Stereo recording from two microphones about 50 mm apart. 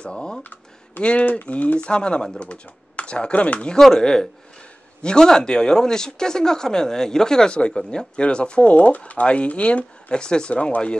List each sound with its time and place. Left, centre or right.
0.0 s speech: centre
0.4 s a sound: left
1.0 s speech: left